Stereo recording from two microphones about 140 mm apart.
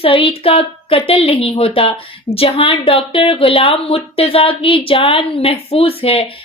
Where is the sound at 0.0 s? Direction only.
40° left (ahead or behind).